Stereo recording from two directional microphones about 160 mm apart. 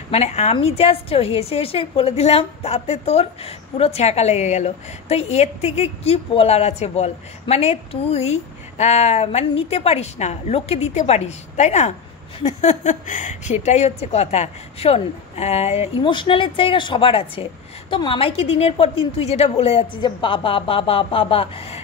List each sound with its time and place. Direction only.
0.1 s a woman's voice: 45° left (ahead or behind)